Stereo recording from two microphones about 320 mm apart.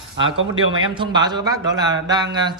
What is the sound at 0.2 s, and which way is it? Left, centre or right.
Speech, right.